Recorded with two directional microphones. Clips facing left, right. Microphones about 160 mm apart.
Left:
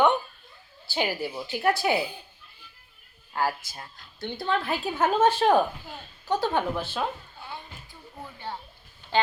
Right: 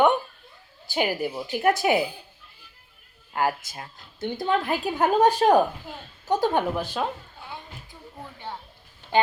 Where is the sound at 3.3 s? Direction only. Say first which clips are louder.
Right 3 dB; 15° right (ahead or behind).